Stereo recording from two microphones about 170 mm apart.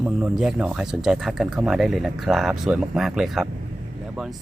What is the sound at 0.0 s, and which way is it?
Speech, 5° right (ahead or behind).